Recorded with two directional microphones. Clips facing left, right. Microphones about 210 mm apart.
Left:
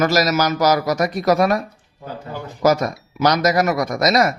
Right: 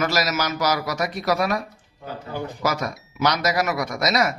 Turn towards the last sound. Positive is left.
turn(degrees=40)  # may be behind; listen again after turning